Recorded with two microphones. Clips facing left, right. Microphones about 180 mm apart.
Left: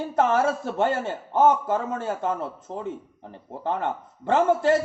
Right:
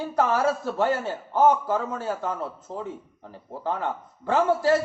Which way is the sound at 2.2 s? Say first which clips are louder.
Left 3 dB; 20° left (ahead or behind).